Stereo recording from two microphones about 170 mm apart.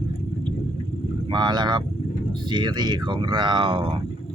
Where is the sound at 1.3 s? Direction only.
25° right (ahead or behind).